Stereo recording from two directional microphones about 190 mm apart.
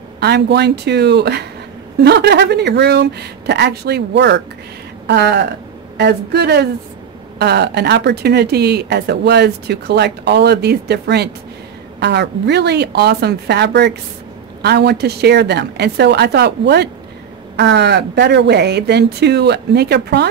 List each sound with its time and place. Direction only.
0.2 s speech: 60° right (ahead or behind)